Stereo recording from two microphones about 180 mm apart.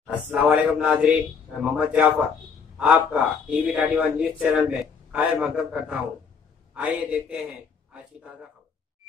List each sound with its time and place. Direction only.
0.0 s a man's voice: 5° right (ahead or behind)